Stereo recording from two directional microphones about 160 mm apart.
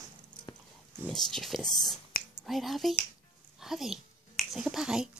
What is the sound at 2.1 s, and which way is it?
Whispering, 70° left (ahead or behind).